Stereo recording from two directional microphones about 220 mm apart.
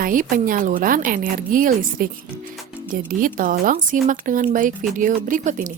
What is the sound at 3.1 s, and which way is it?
A woman's voice, 40° right (ahead or behind).